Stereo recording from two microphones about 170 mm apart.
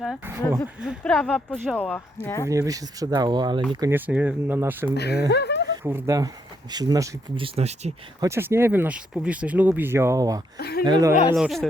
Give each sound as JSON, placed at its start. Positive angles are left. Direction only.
{"t": 0.8, "sound": "speech", "side_deg": 0}
{"t": 1.2, "sound": "speech", "side_deg": 10}
{"t": 2.5, "sound": "speech", "side_deg": -20}
{"t": 3.9, "sound": "speech", "side_deg": -10}
{"t": 4.9, "sound": "speech", "side_deg": 75}
{"t": 5.3, "sound": "a sound", "side_deg": 80}
{"t": 5.8, "sound": "speech", "side_deg": -10}
{"t": 7.4, "sound": "speech", "side_deg": -35}
{"t": 8.2, "sound": "speech", "side_deg": -15}
{"t": 10.6, "sound": "speech", "side_deg": 65}
{"t": 10.8, "sound": "speech", "side_deg": -25}
{"t": 11.3, "sound": "speech", "side_deg": 0}